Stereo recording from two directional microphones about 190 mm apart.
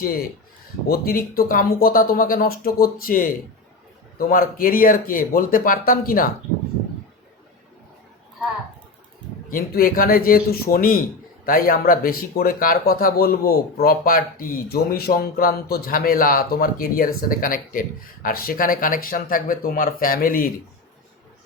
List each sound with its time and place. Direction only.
0.0 s speech: 50° left (ahead or behind)
9.5 s speech: 50° left (ahead or behind)